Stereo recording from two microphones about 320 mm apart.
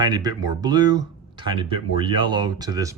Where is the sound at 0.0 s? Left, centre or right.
Centre.